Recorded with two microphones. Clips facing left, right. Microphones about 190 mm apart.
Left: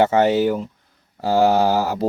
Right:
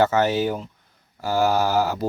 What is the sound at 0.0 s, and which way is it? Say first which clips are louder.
Speech: left 4 dB; 25° left (ahead or behind).